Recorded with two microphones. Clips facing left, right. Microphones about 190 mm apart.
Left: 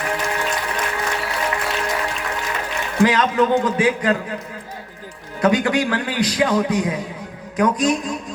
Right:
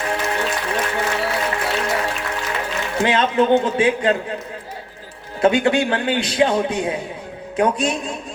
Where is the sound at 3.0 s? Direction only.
25° right (ahead or behind).